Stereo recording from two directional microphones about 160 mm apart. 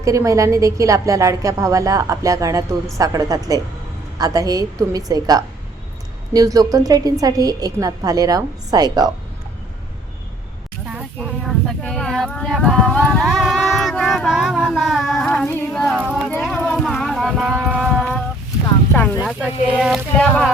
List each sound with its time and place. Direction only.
0.0 s a woman's voice: 20° right (ahead or behind)
11.4 s a sound: 5° left (ahead or behind)
15.4 s speech: 10° left (ahead or behind)
16.0 s speech: 5° right (ahead or behind)
16.7 s music: 5° left (ahead or behind)
17.5 s a sound: 5° right (ahead or behind)
19.2 s speech: 5° right (ahead or behind)